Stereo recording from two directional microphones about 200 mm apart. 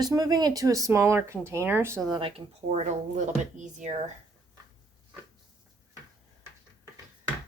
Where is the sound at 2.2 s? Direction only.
25° right (ahead or behind).